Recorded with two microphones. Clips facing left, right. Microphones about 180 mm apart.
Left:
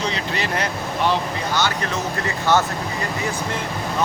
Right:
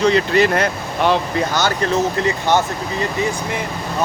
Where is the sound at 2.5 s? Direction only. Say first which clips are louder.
Right 1 dB; 15° right (ahead or behind).